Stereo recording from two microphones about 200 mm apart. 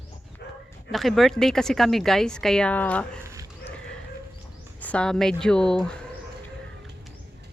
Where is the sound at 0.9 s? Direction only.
Centre (ahead or behind).